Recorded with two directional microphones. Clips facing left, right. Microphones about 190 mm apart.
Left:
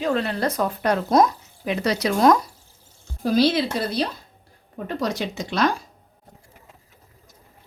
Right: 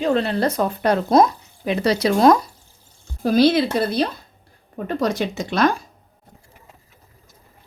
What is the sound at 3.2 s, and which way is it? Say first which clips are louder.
Speech: right 3 dB; 55° right (ahead or behind).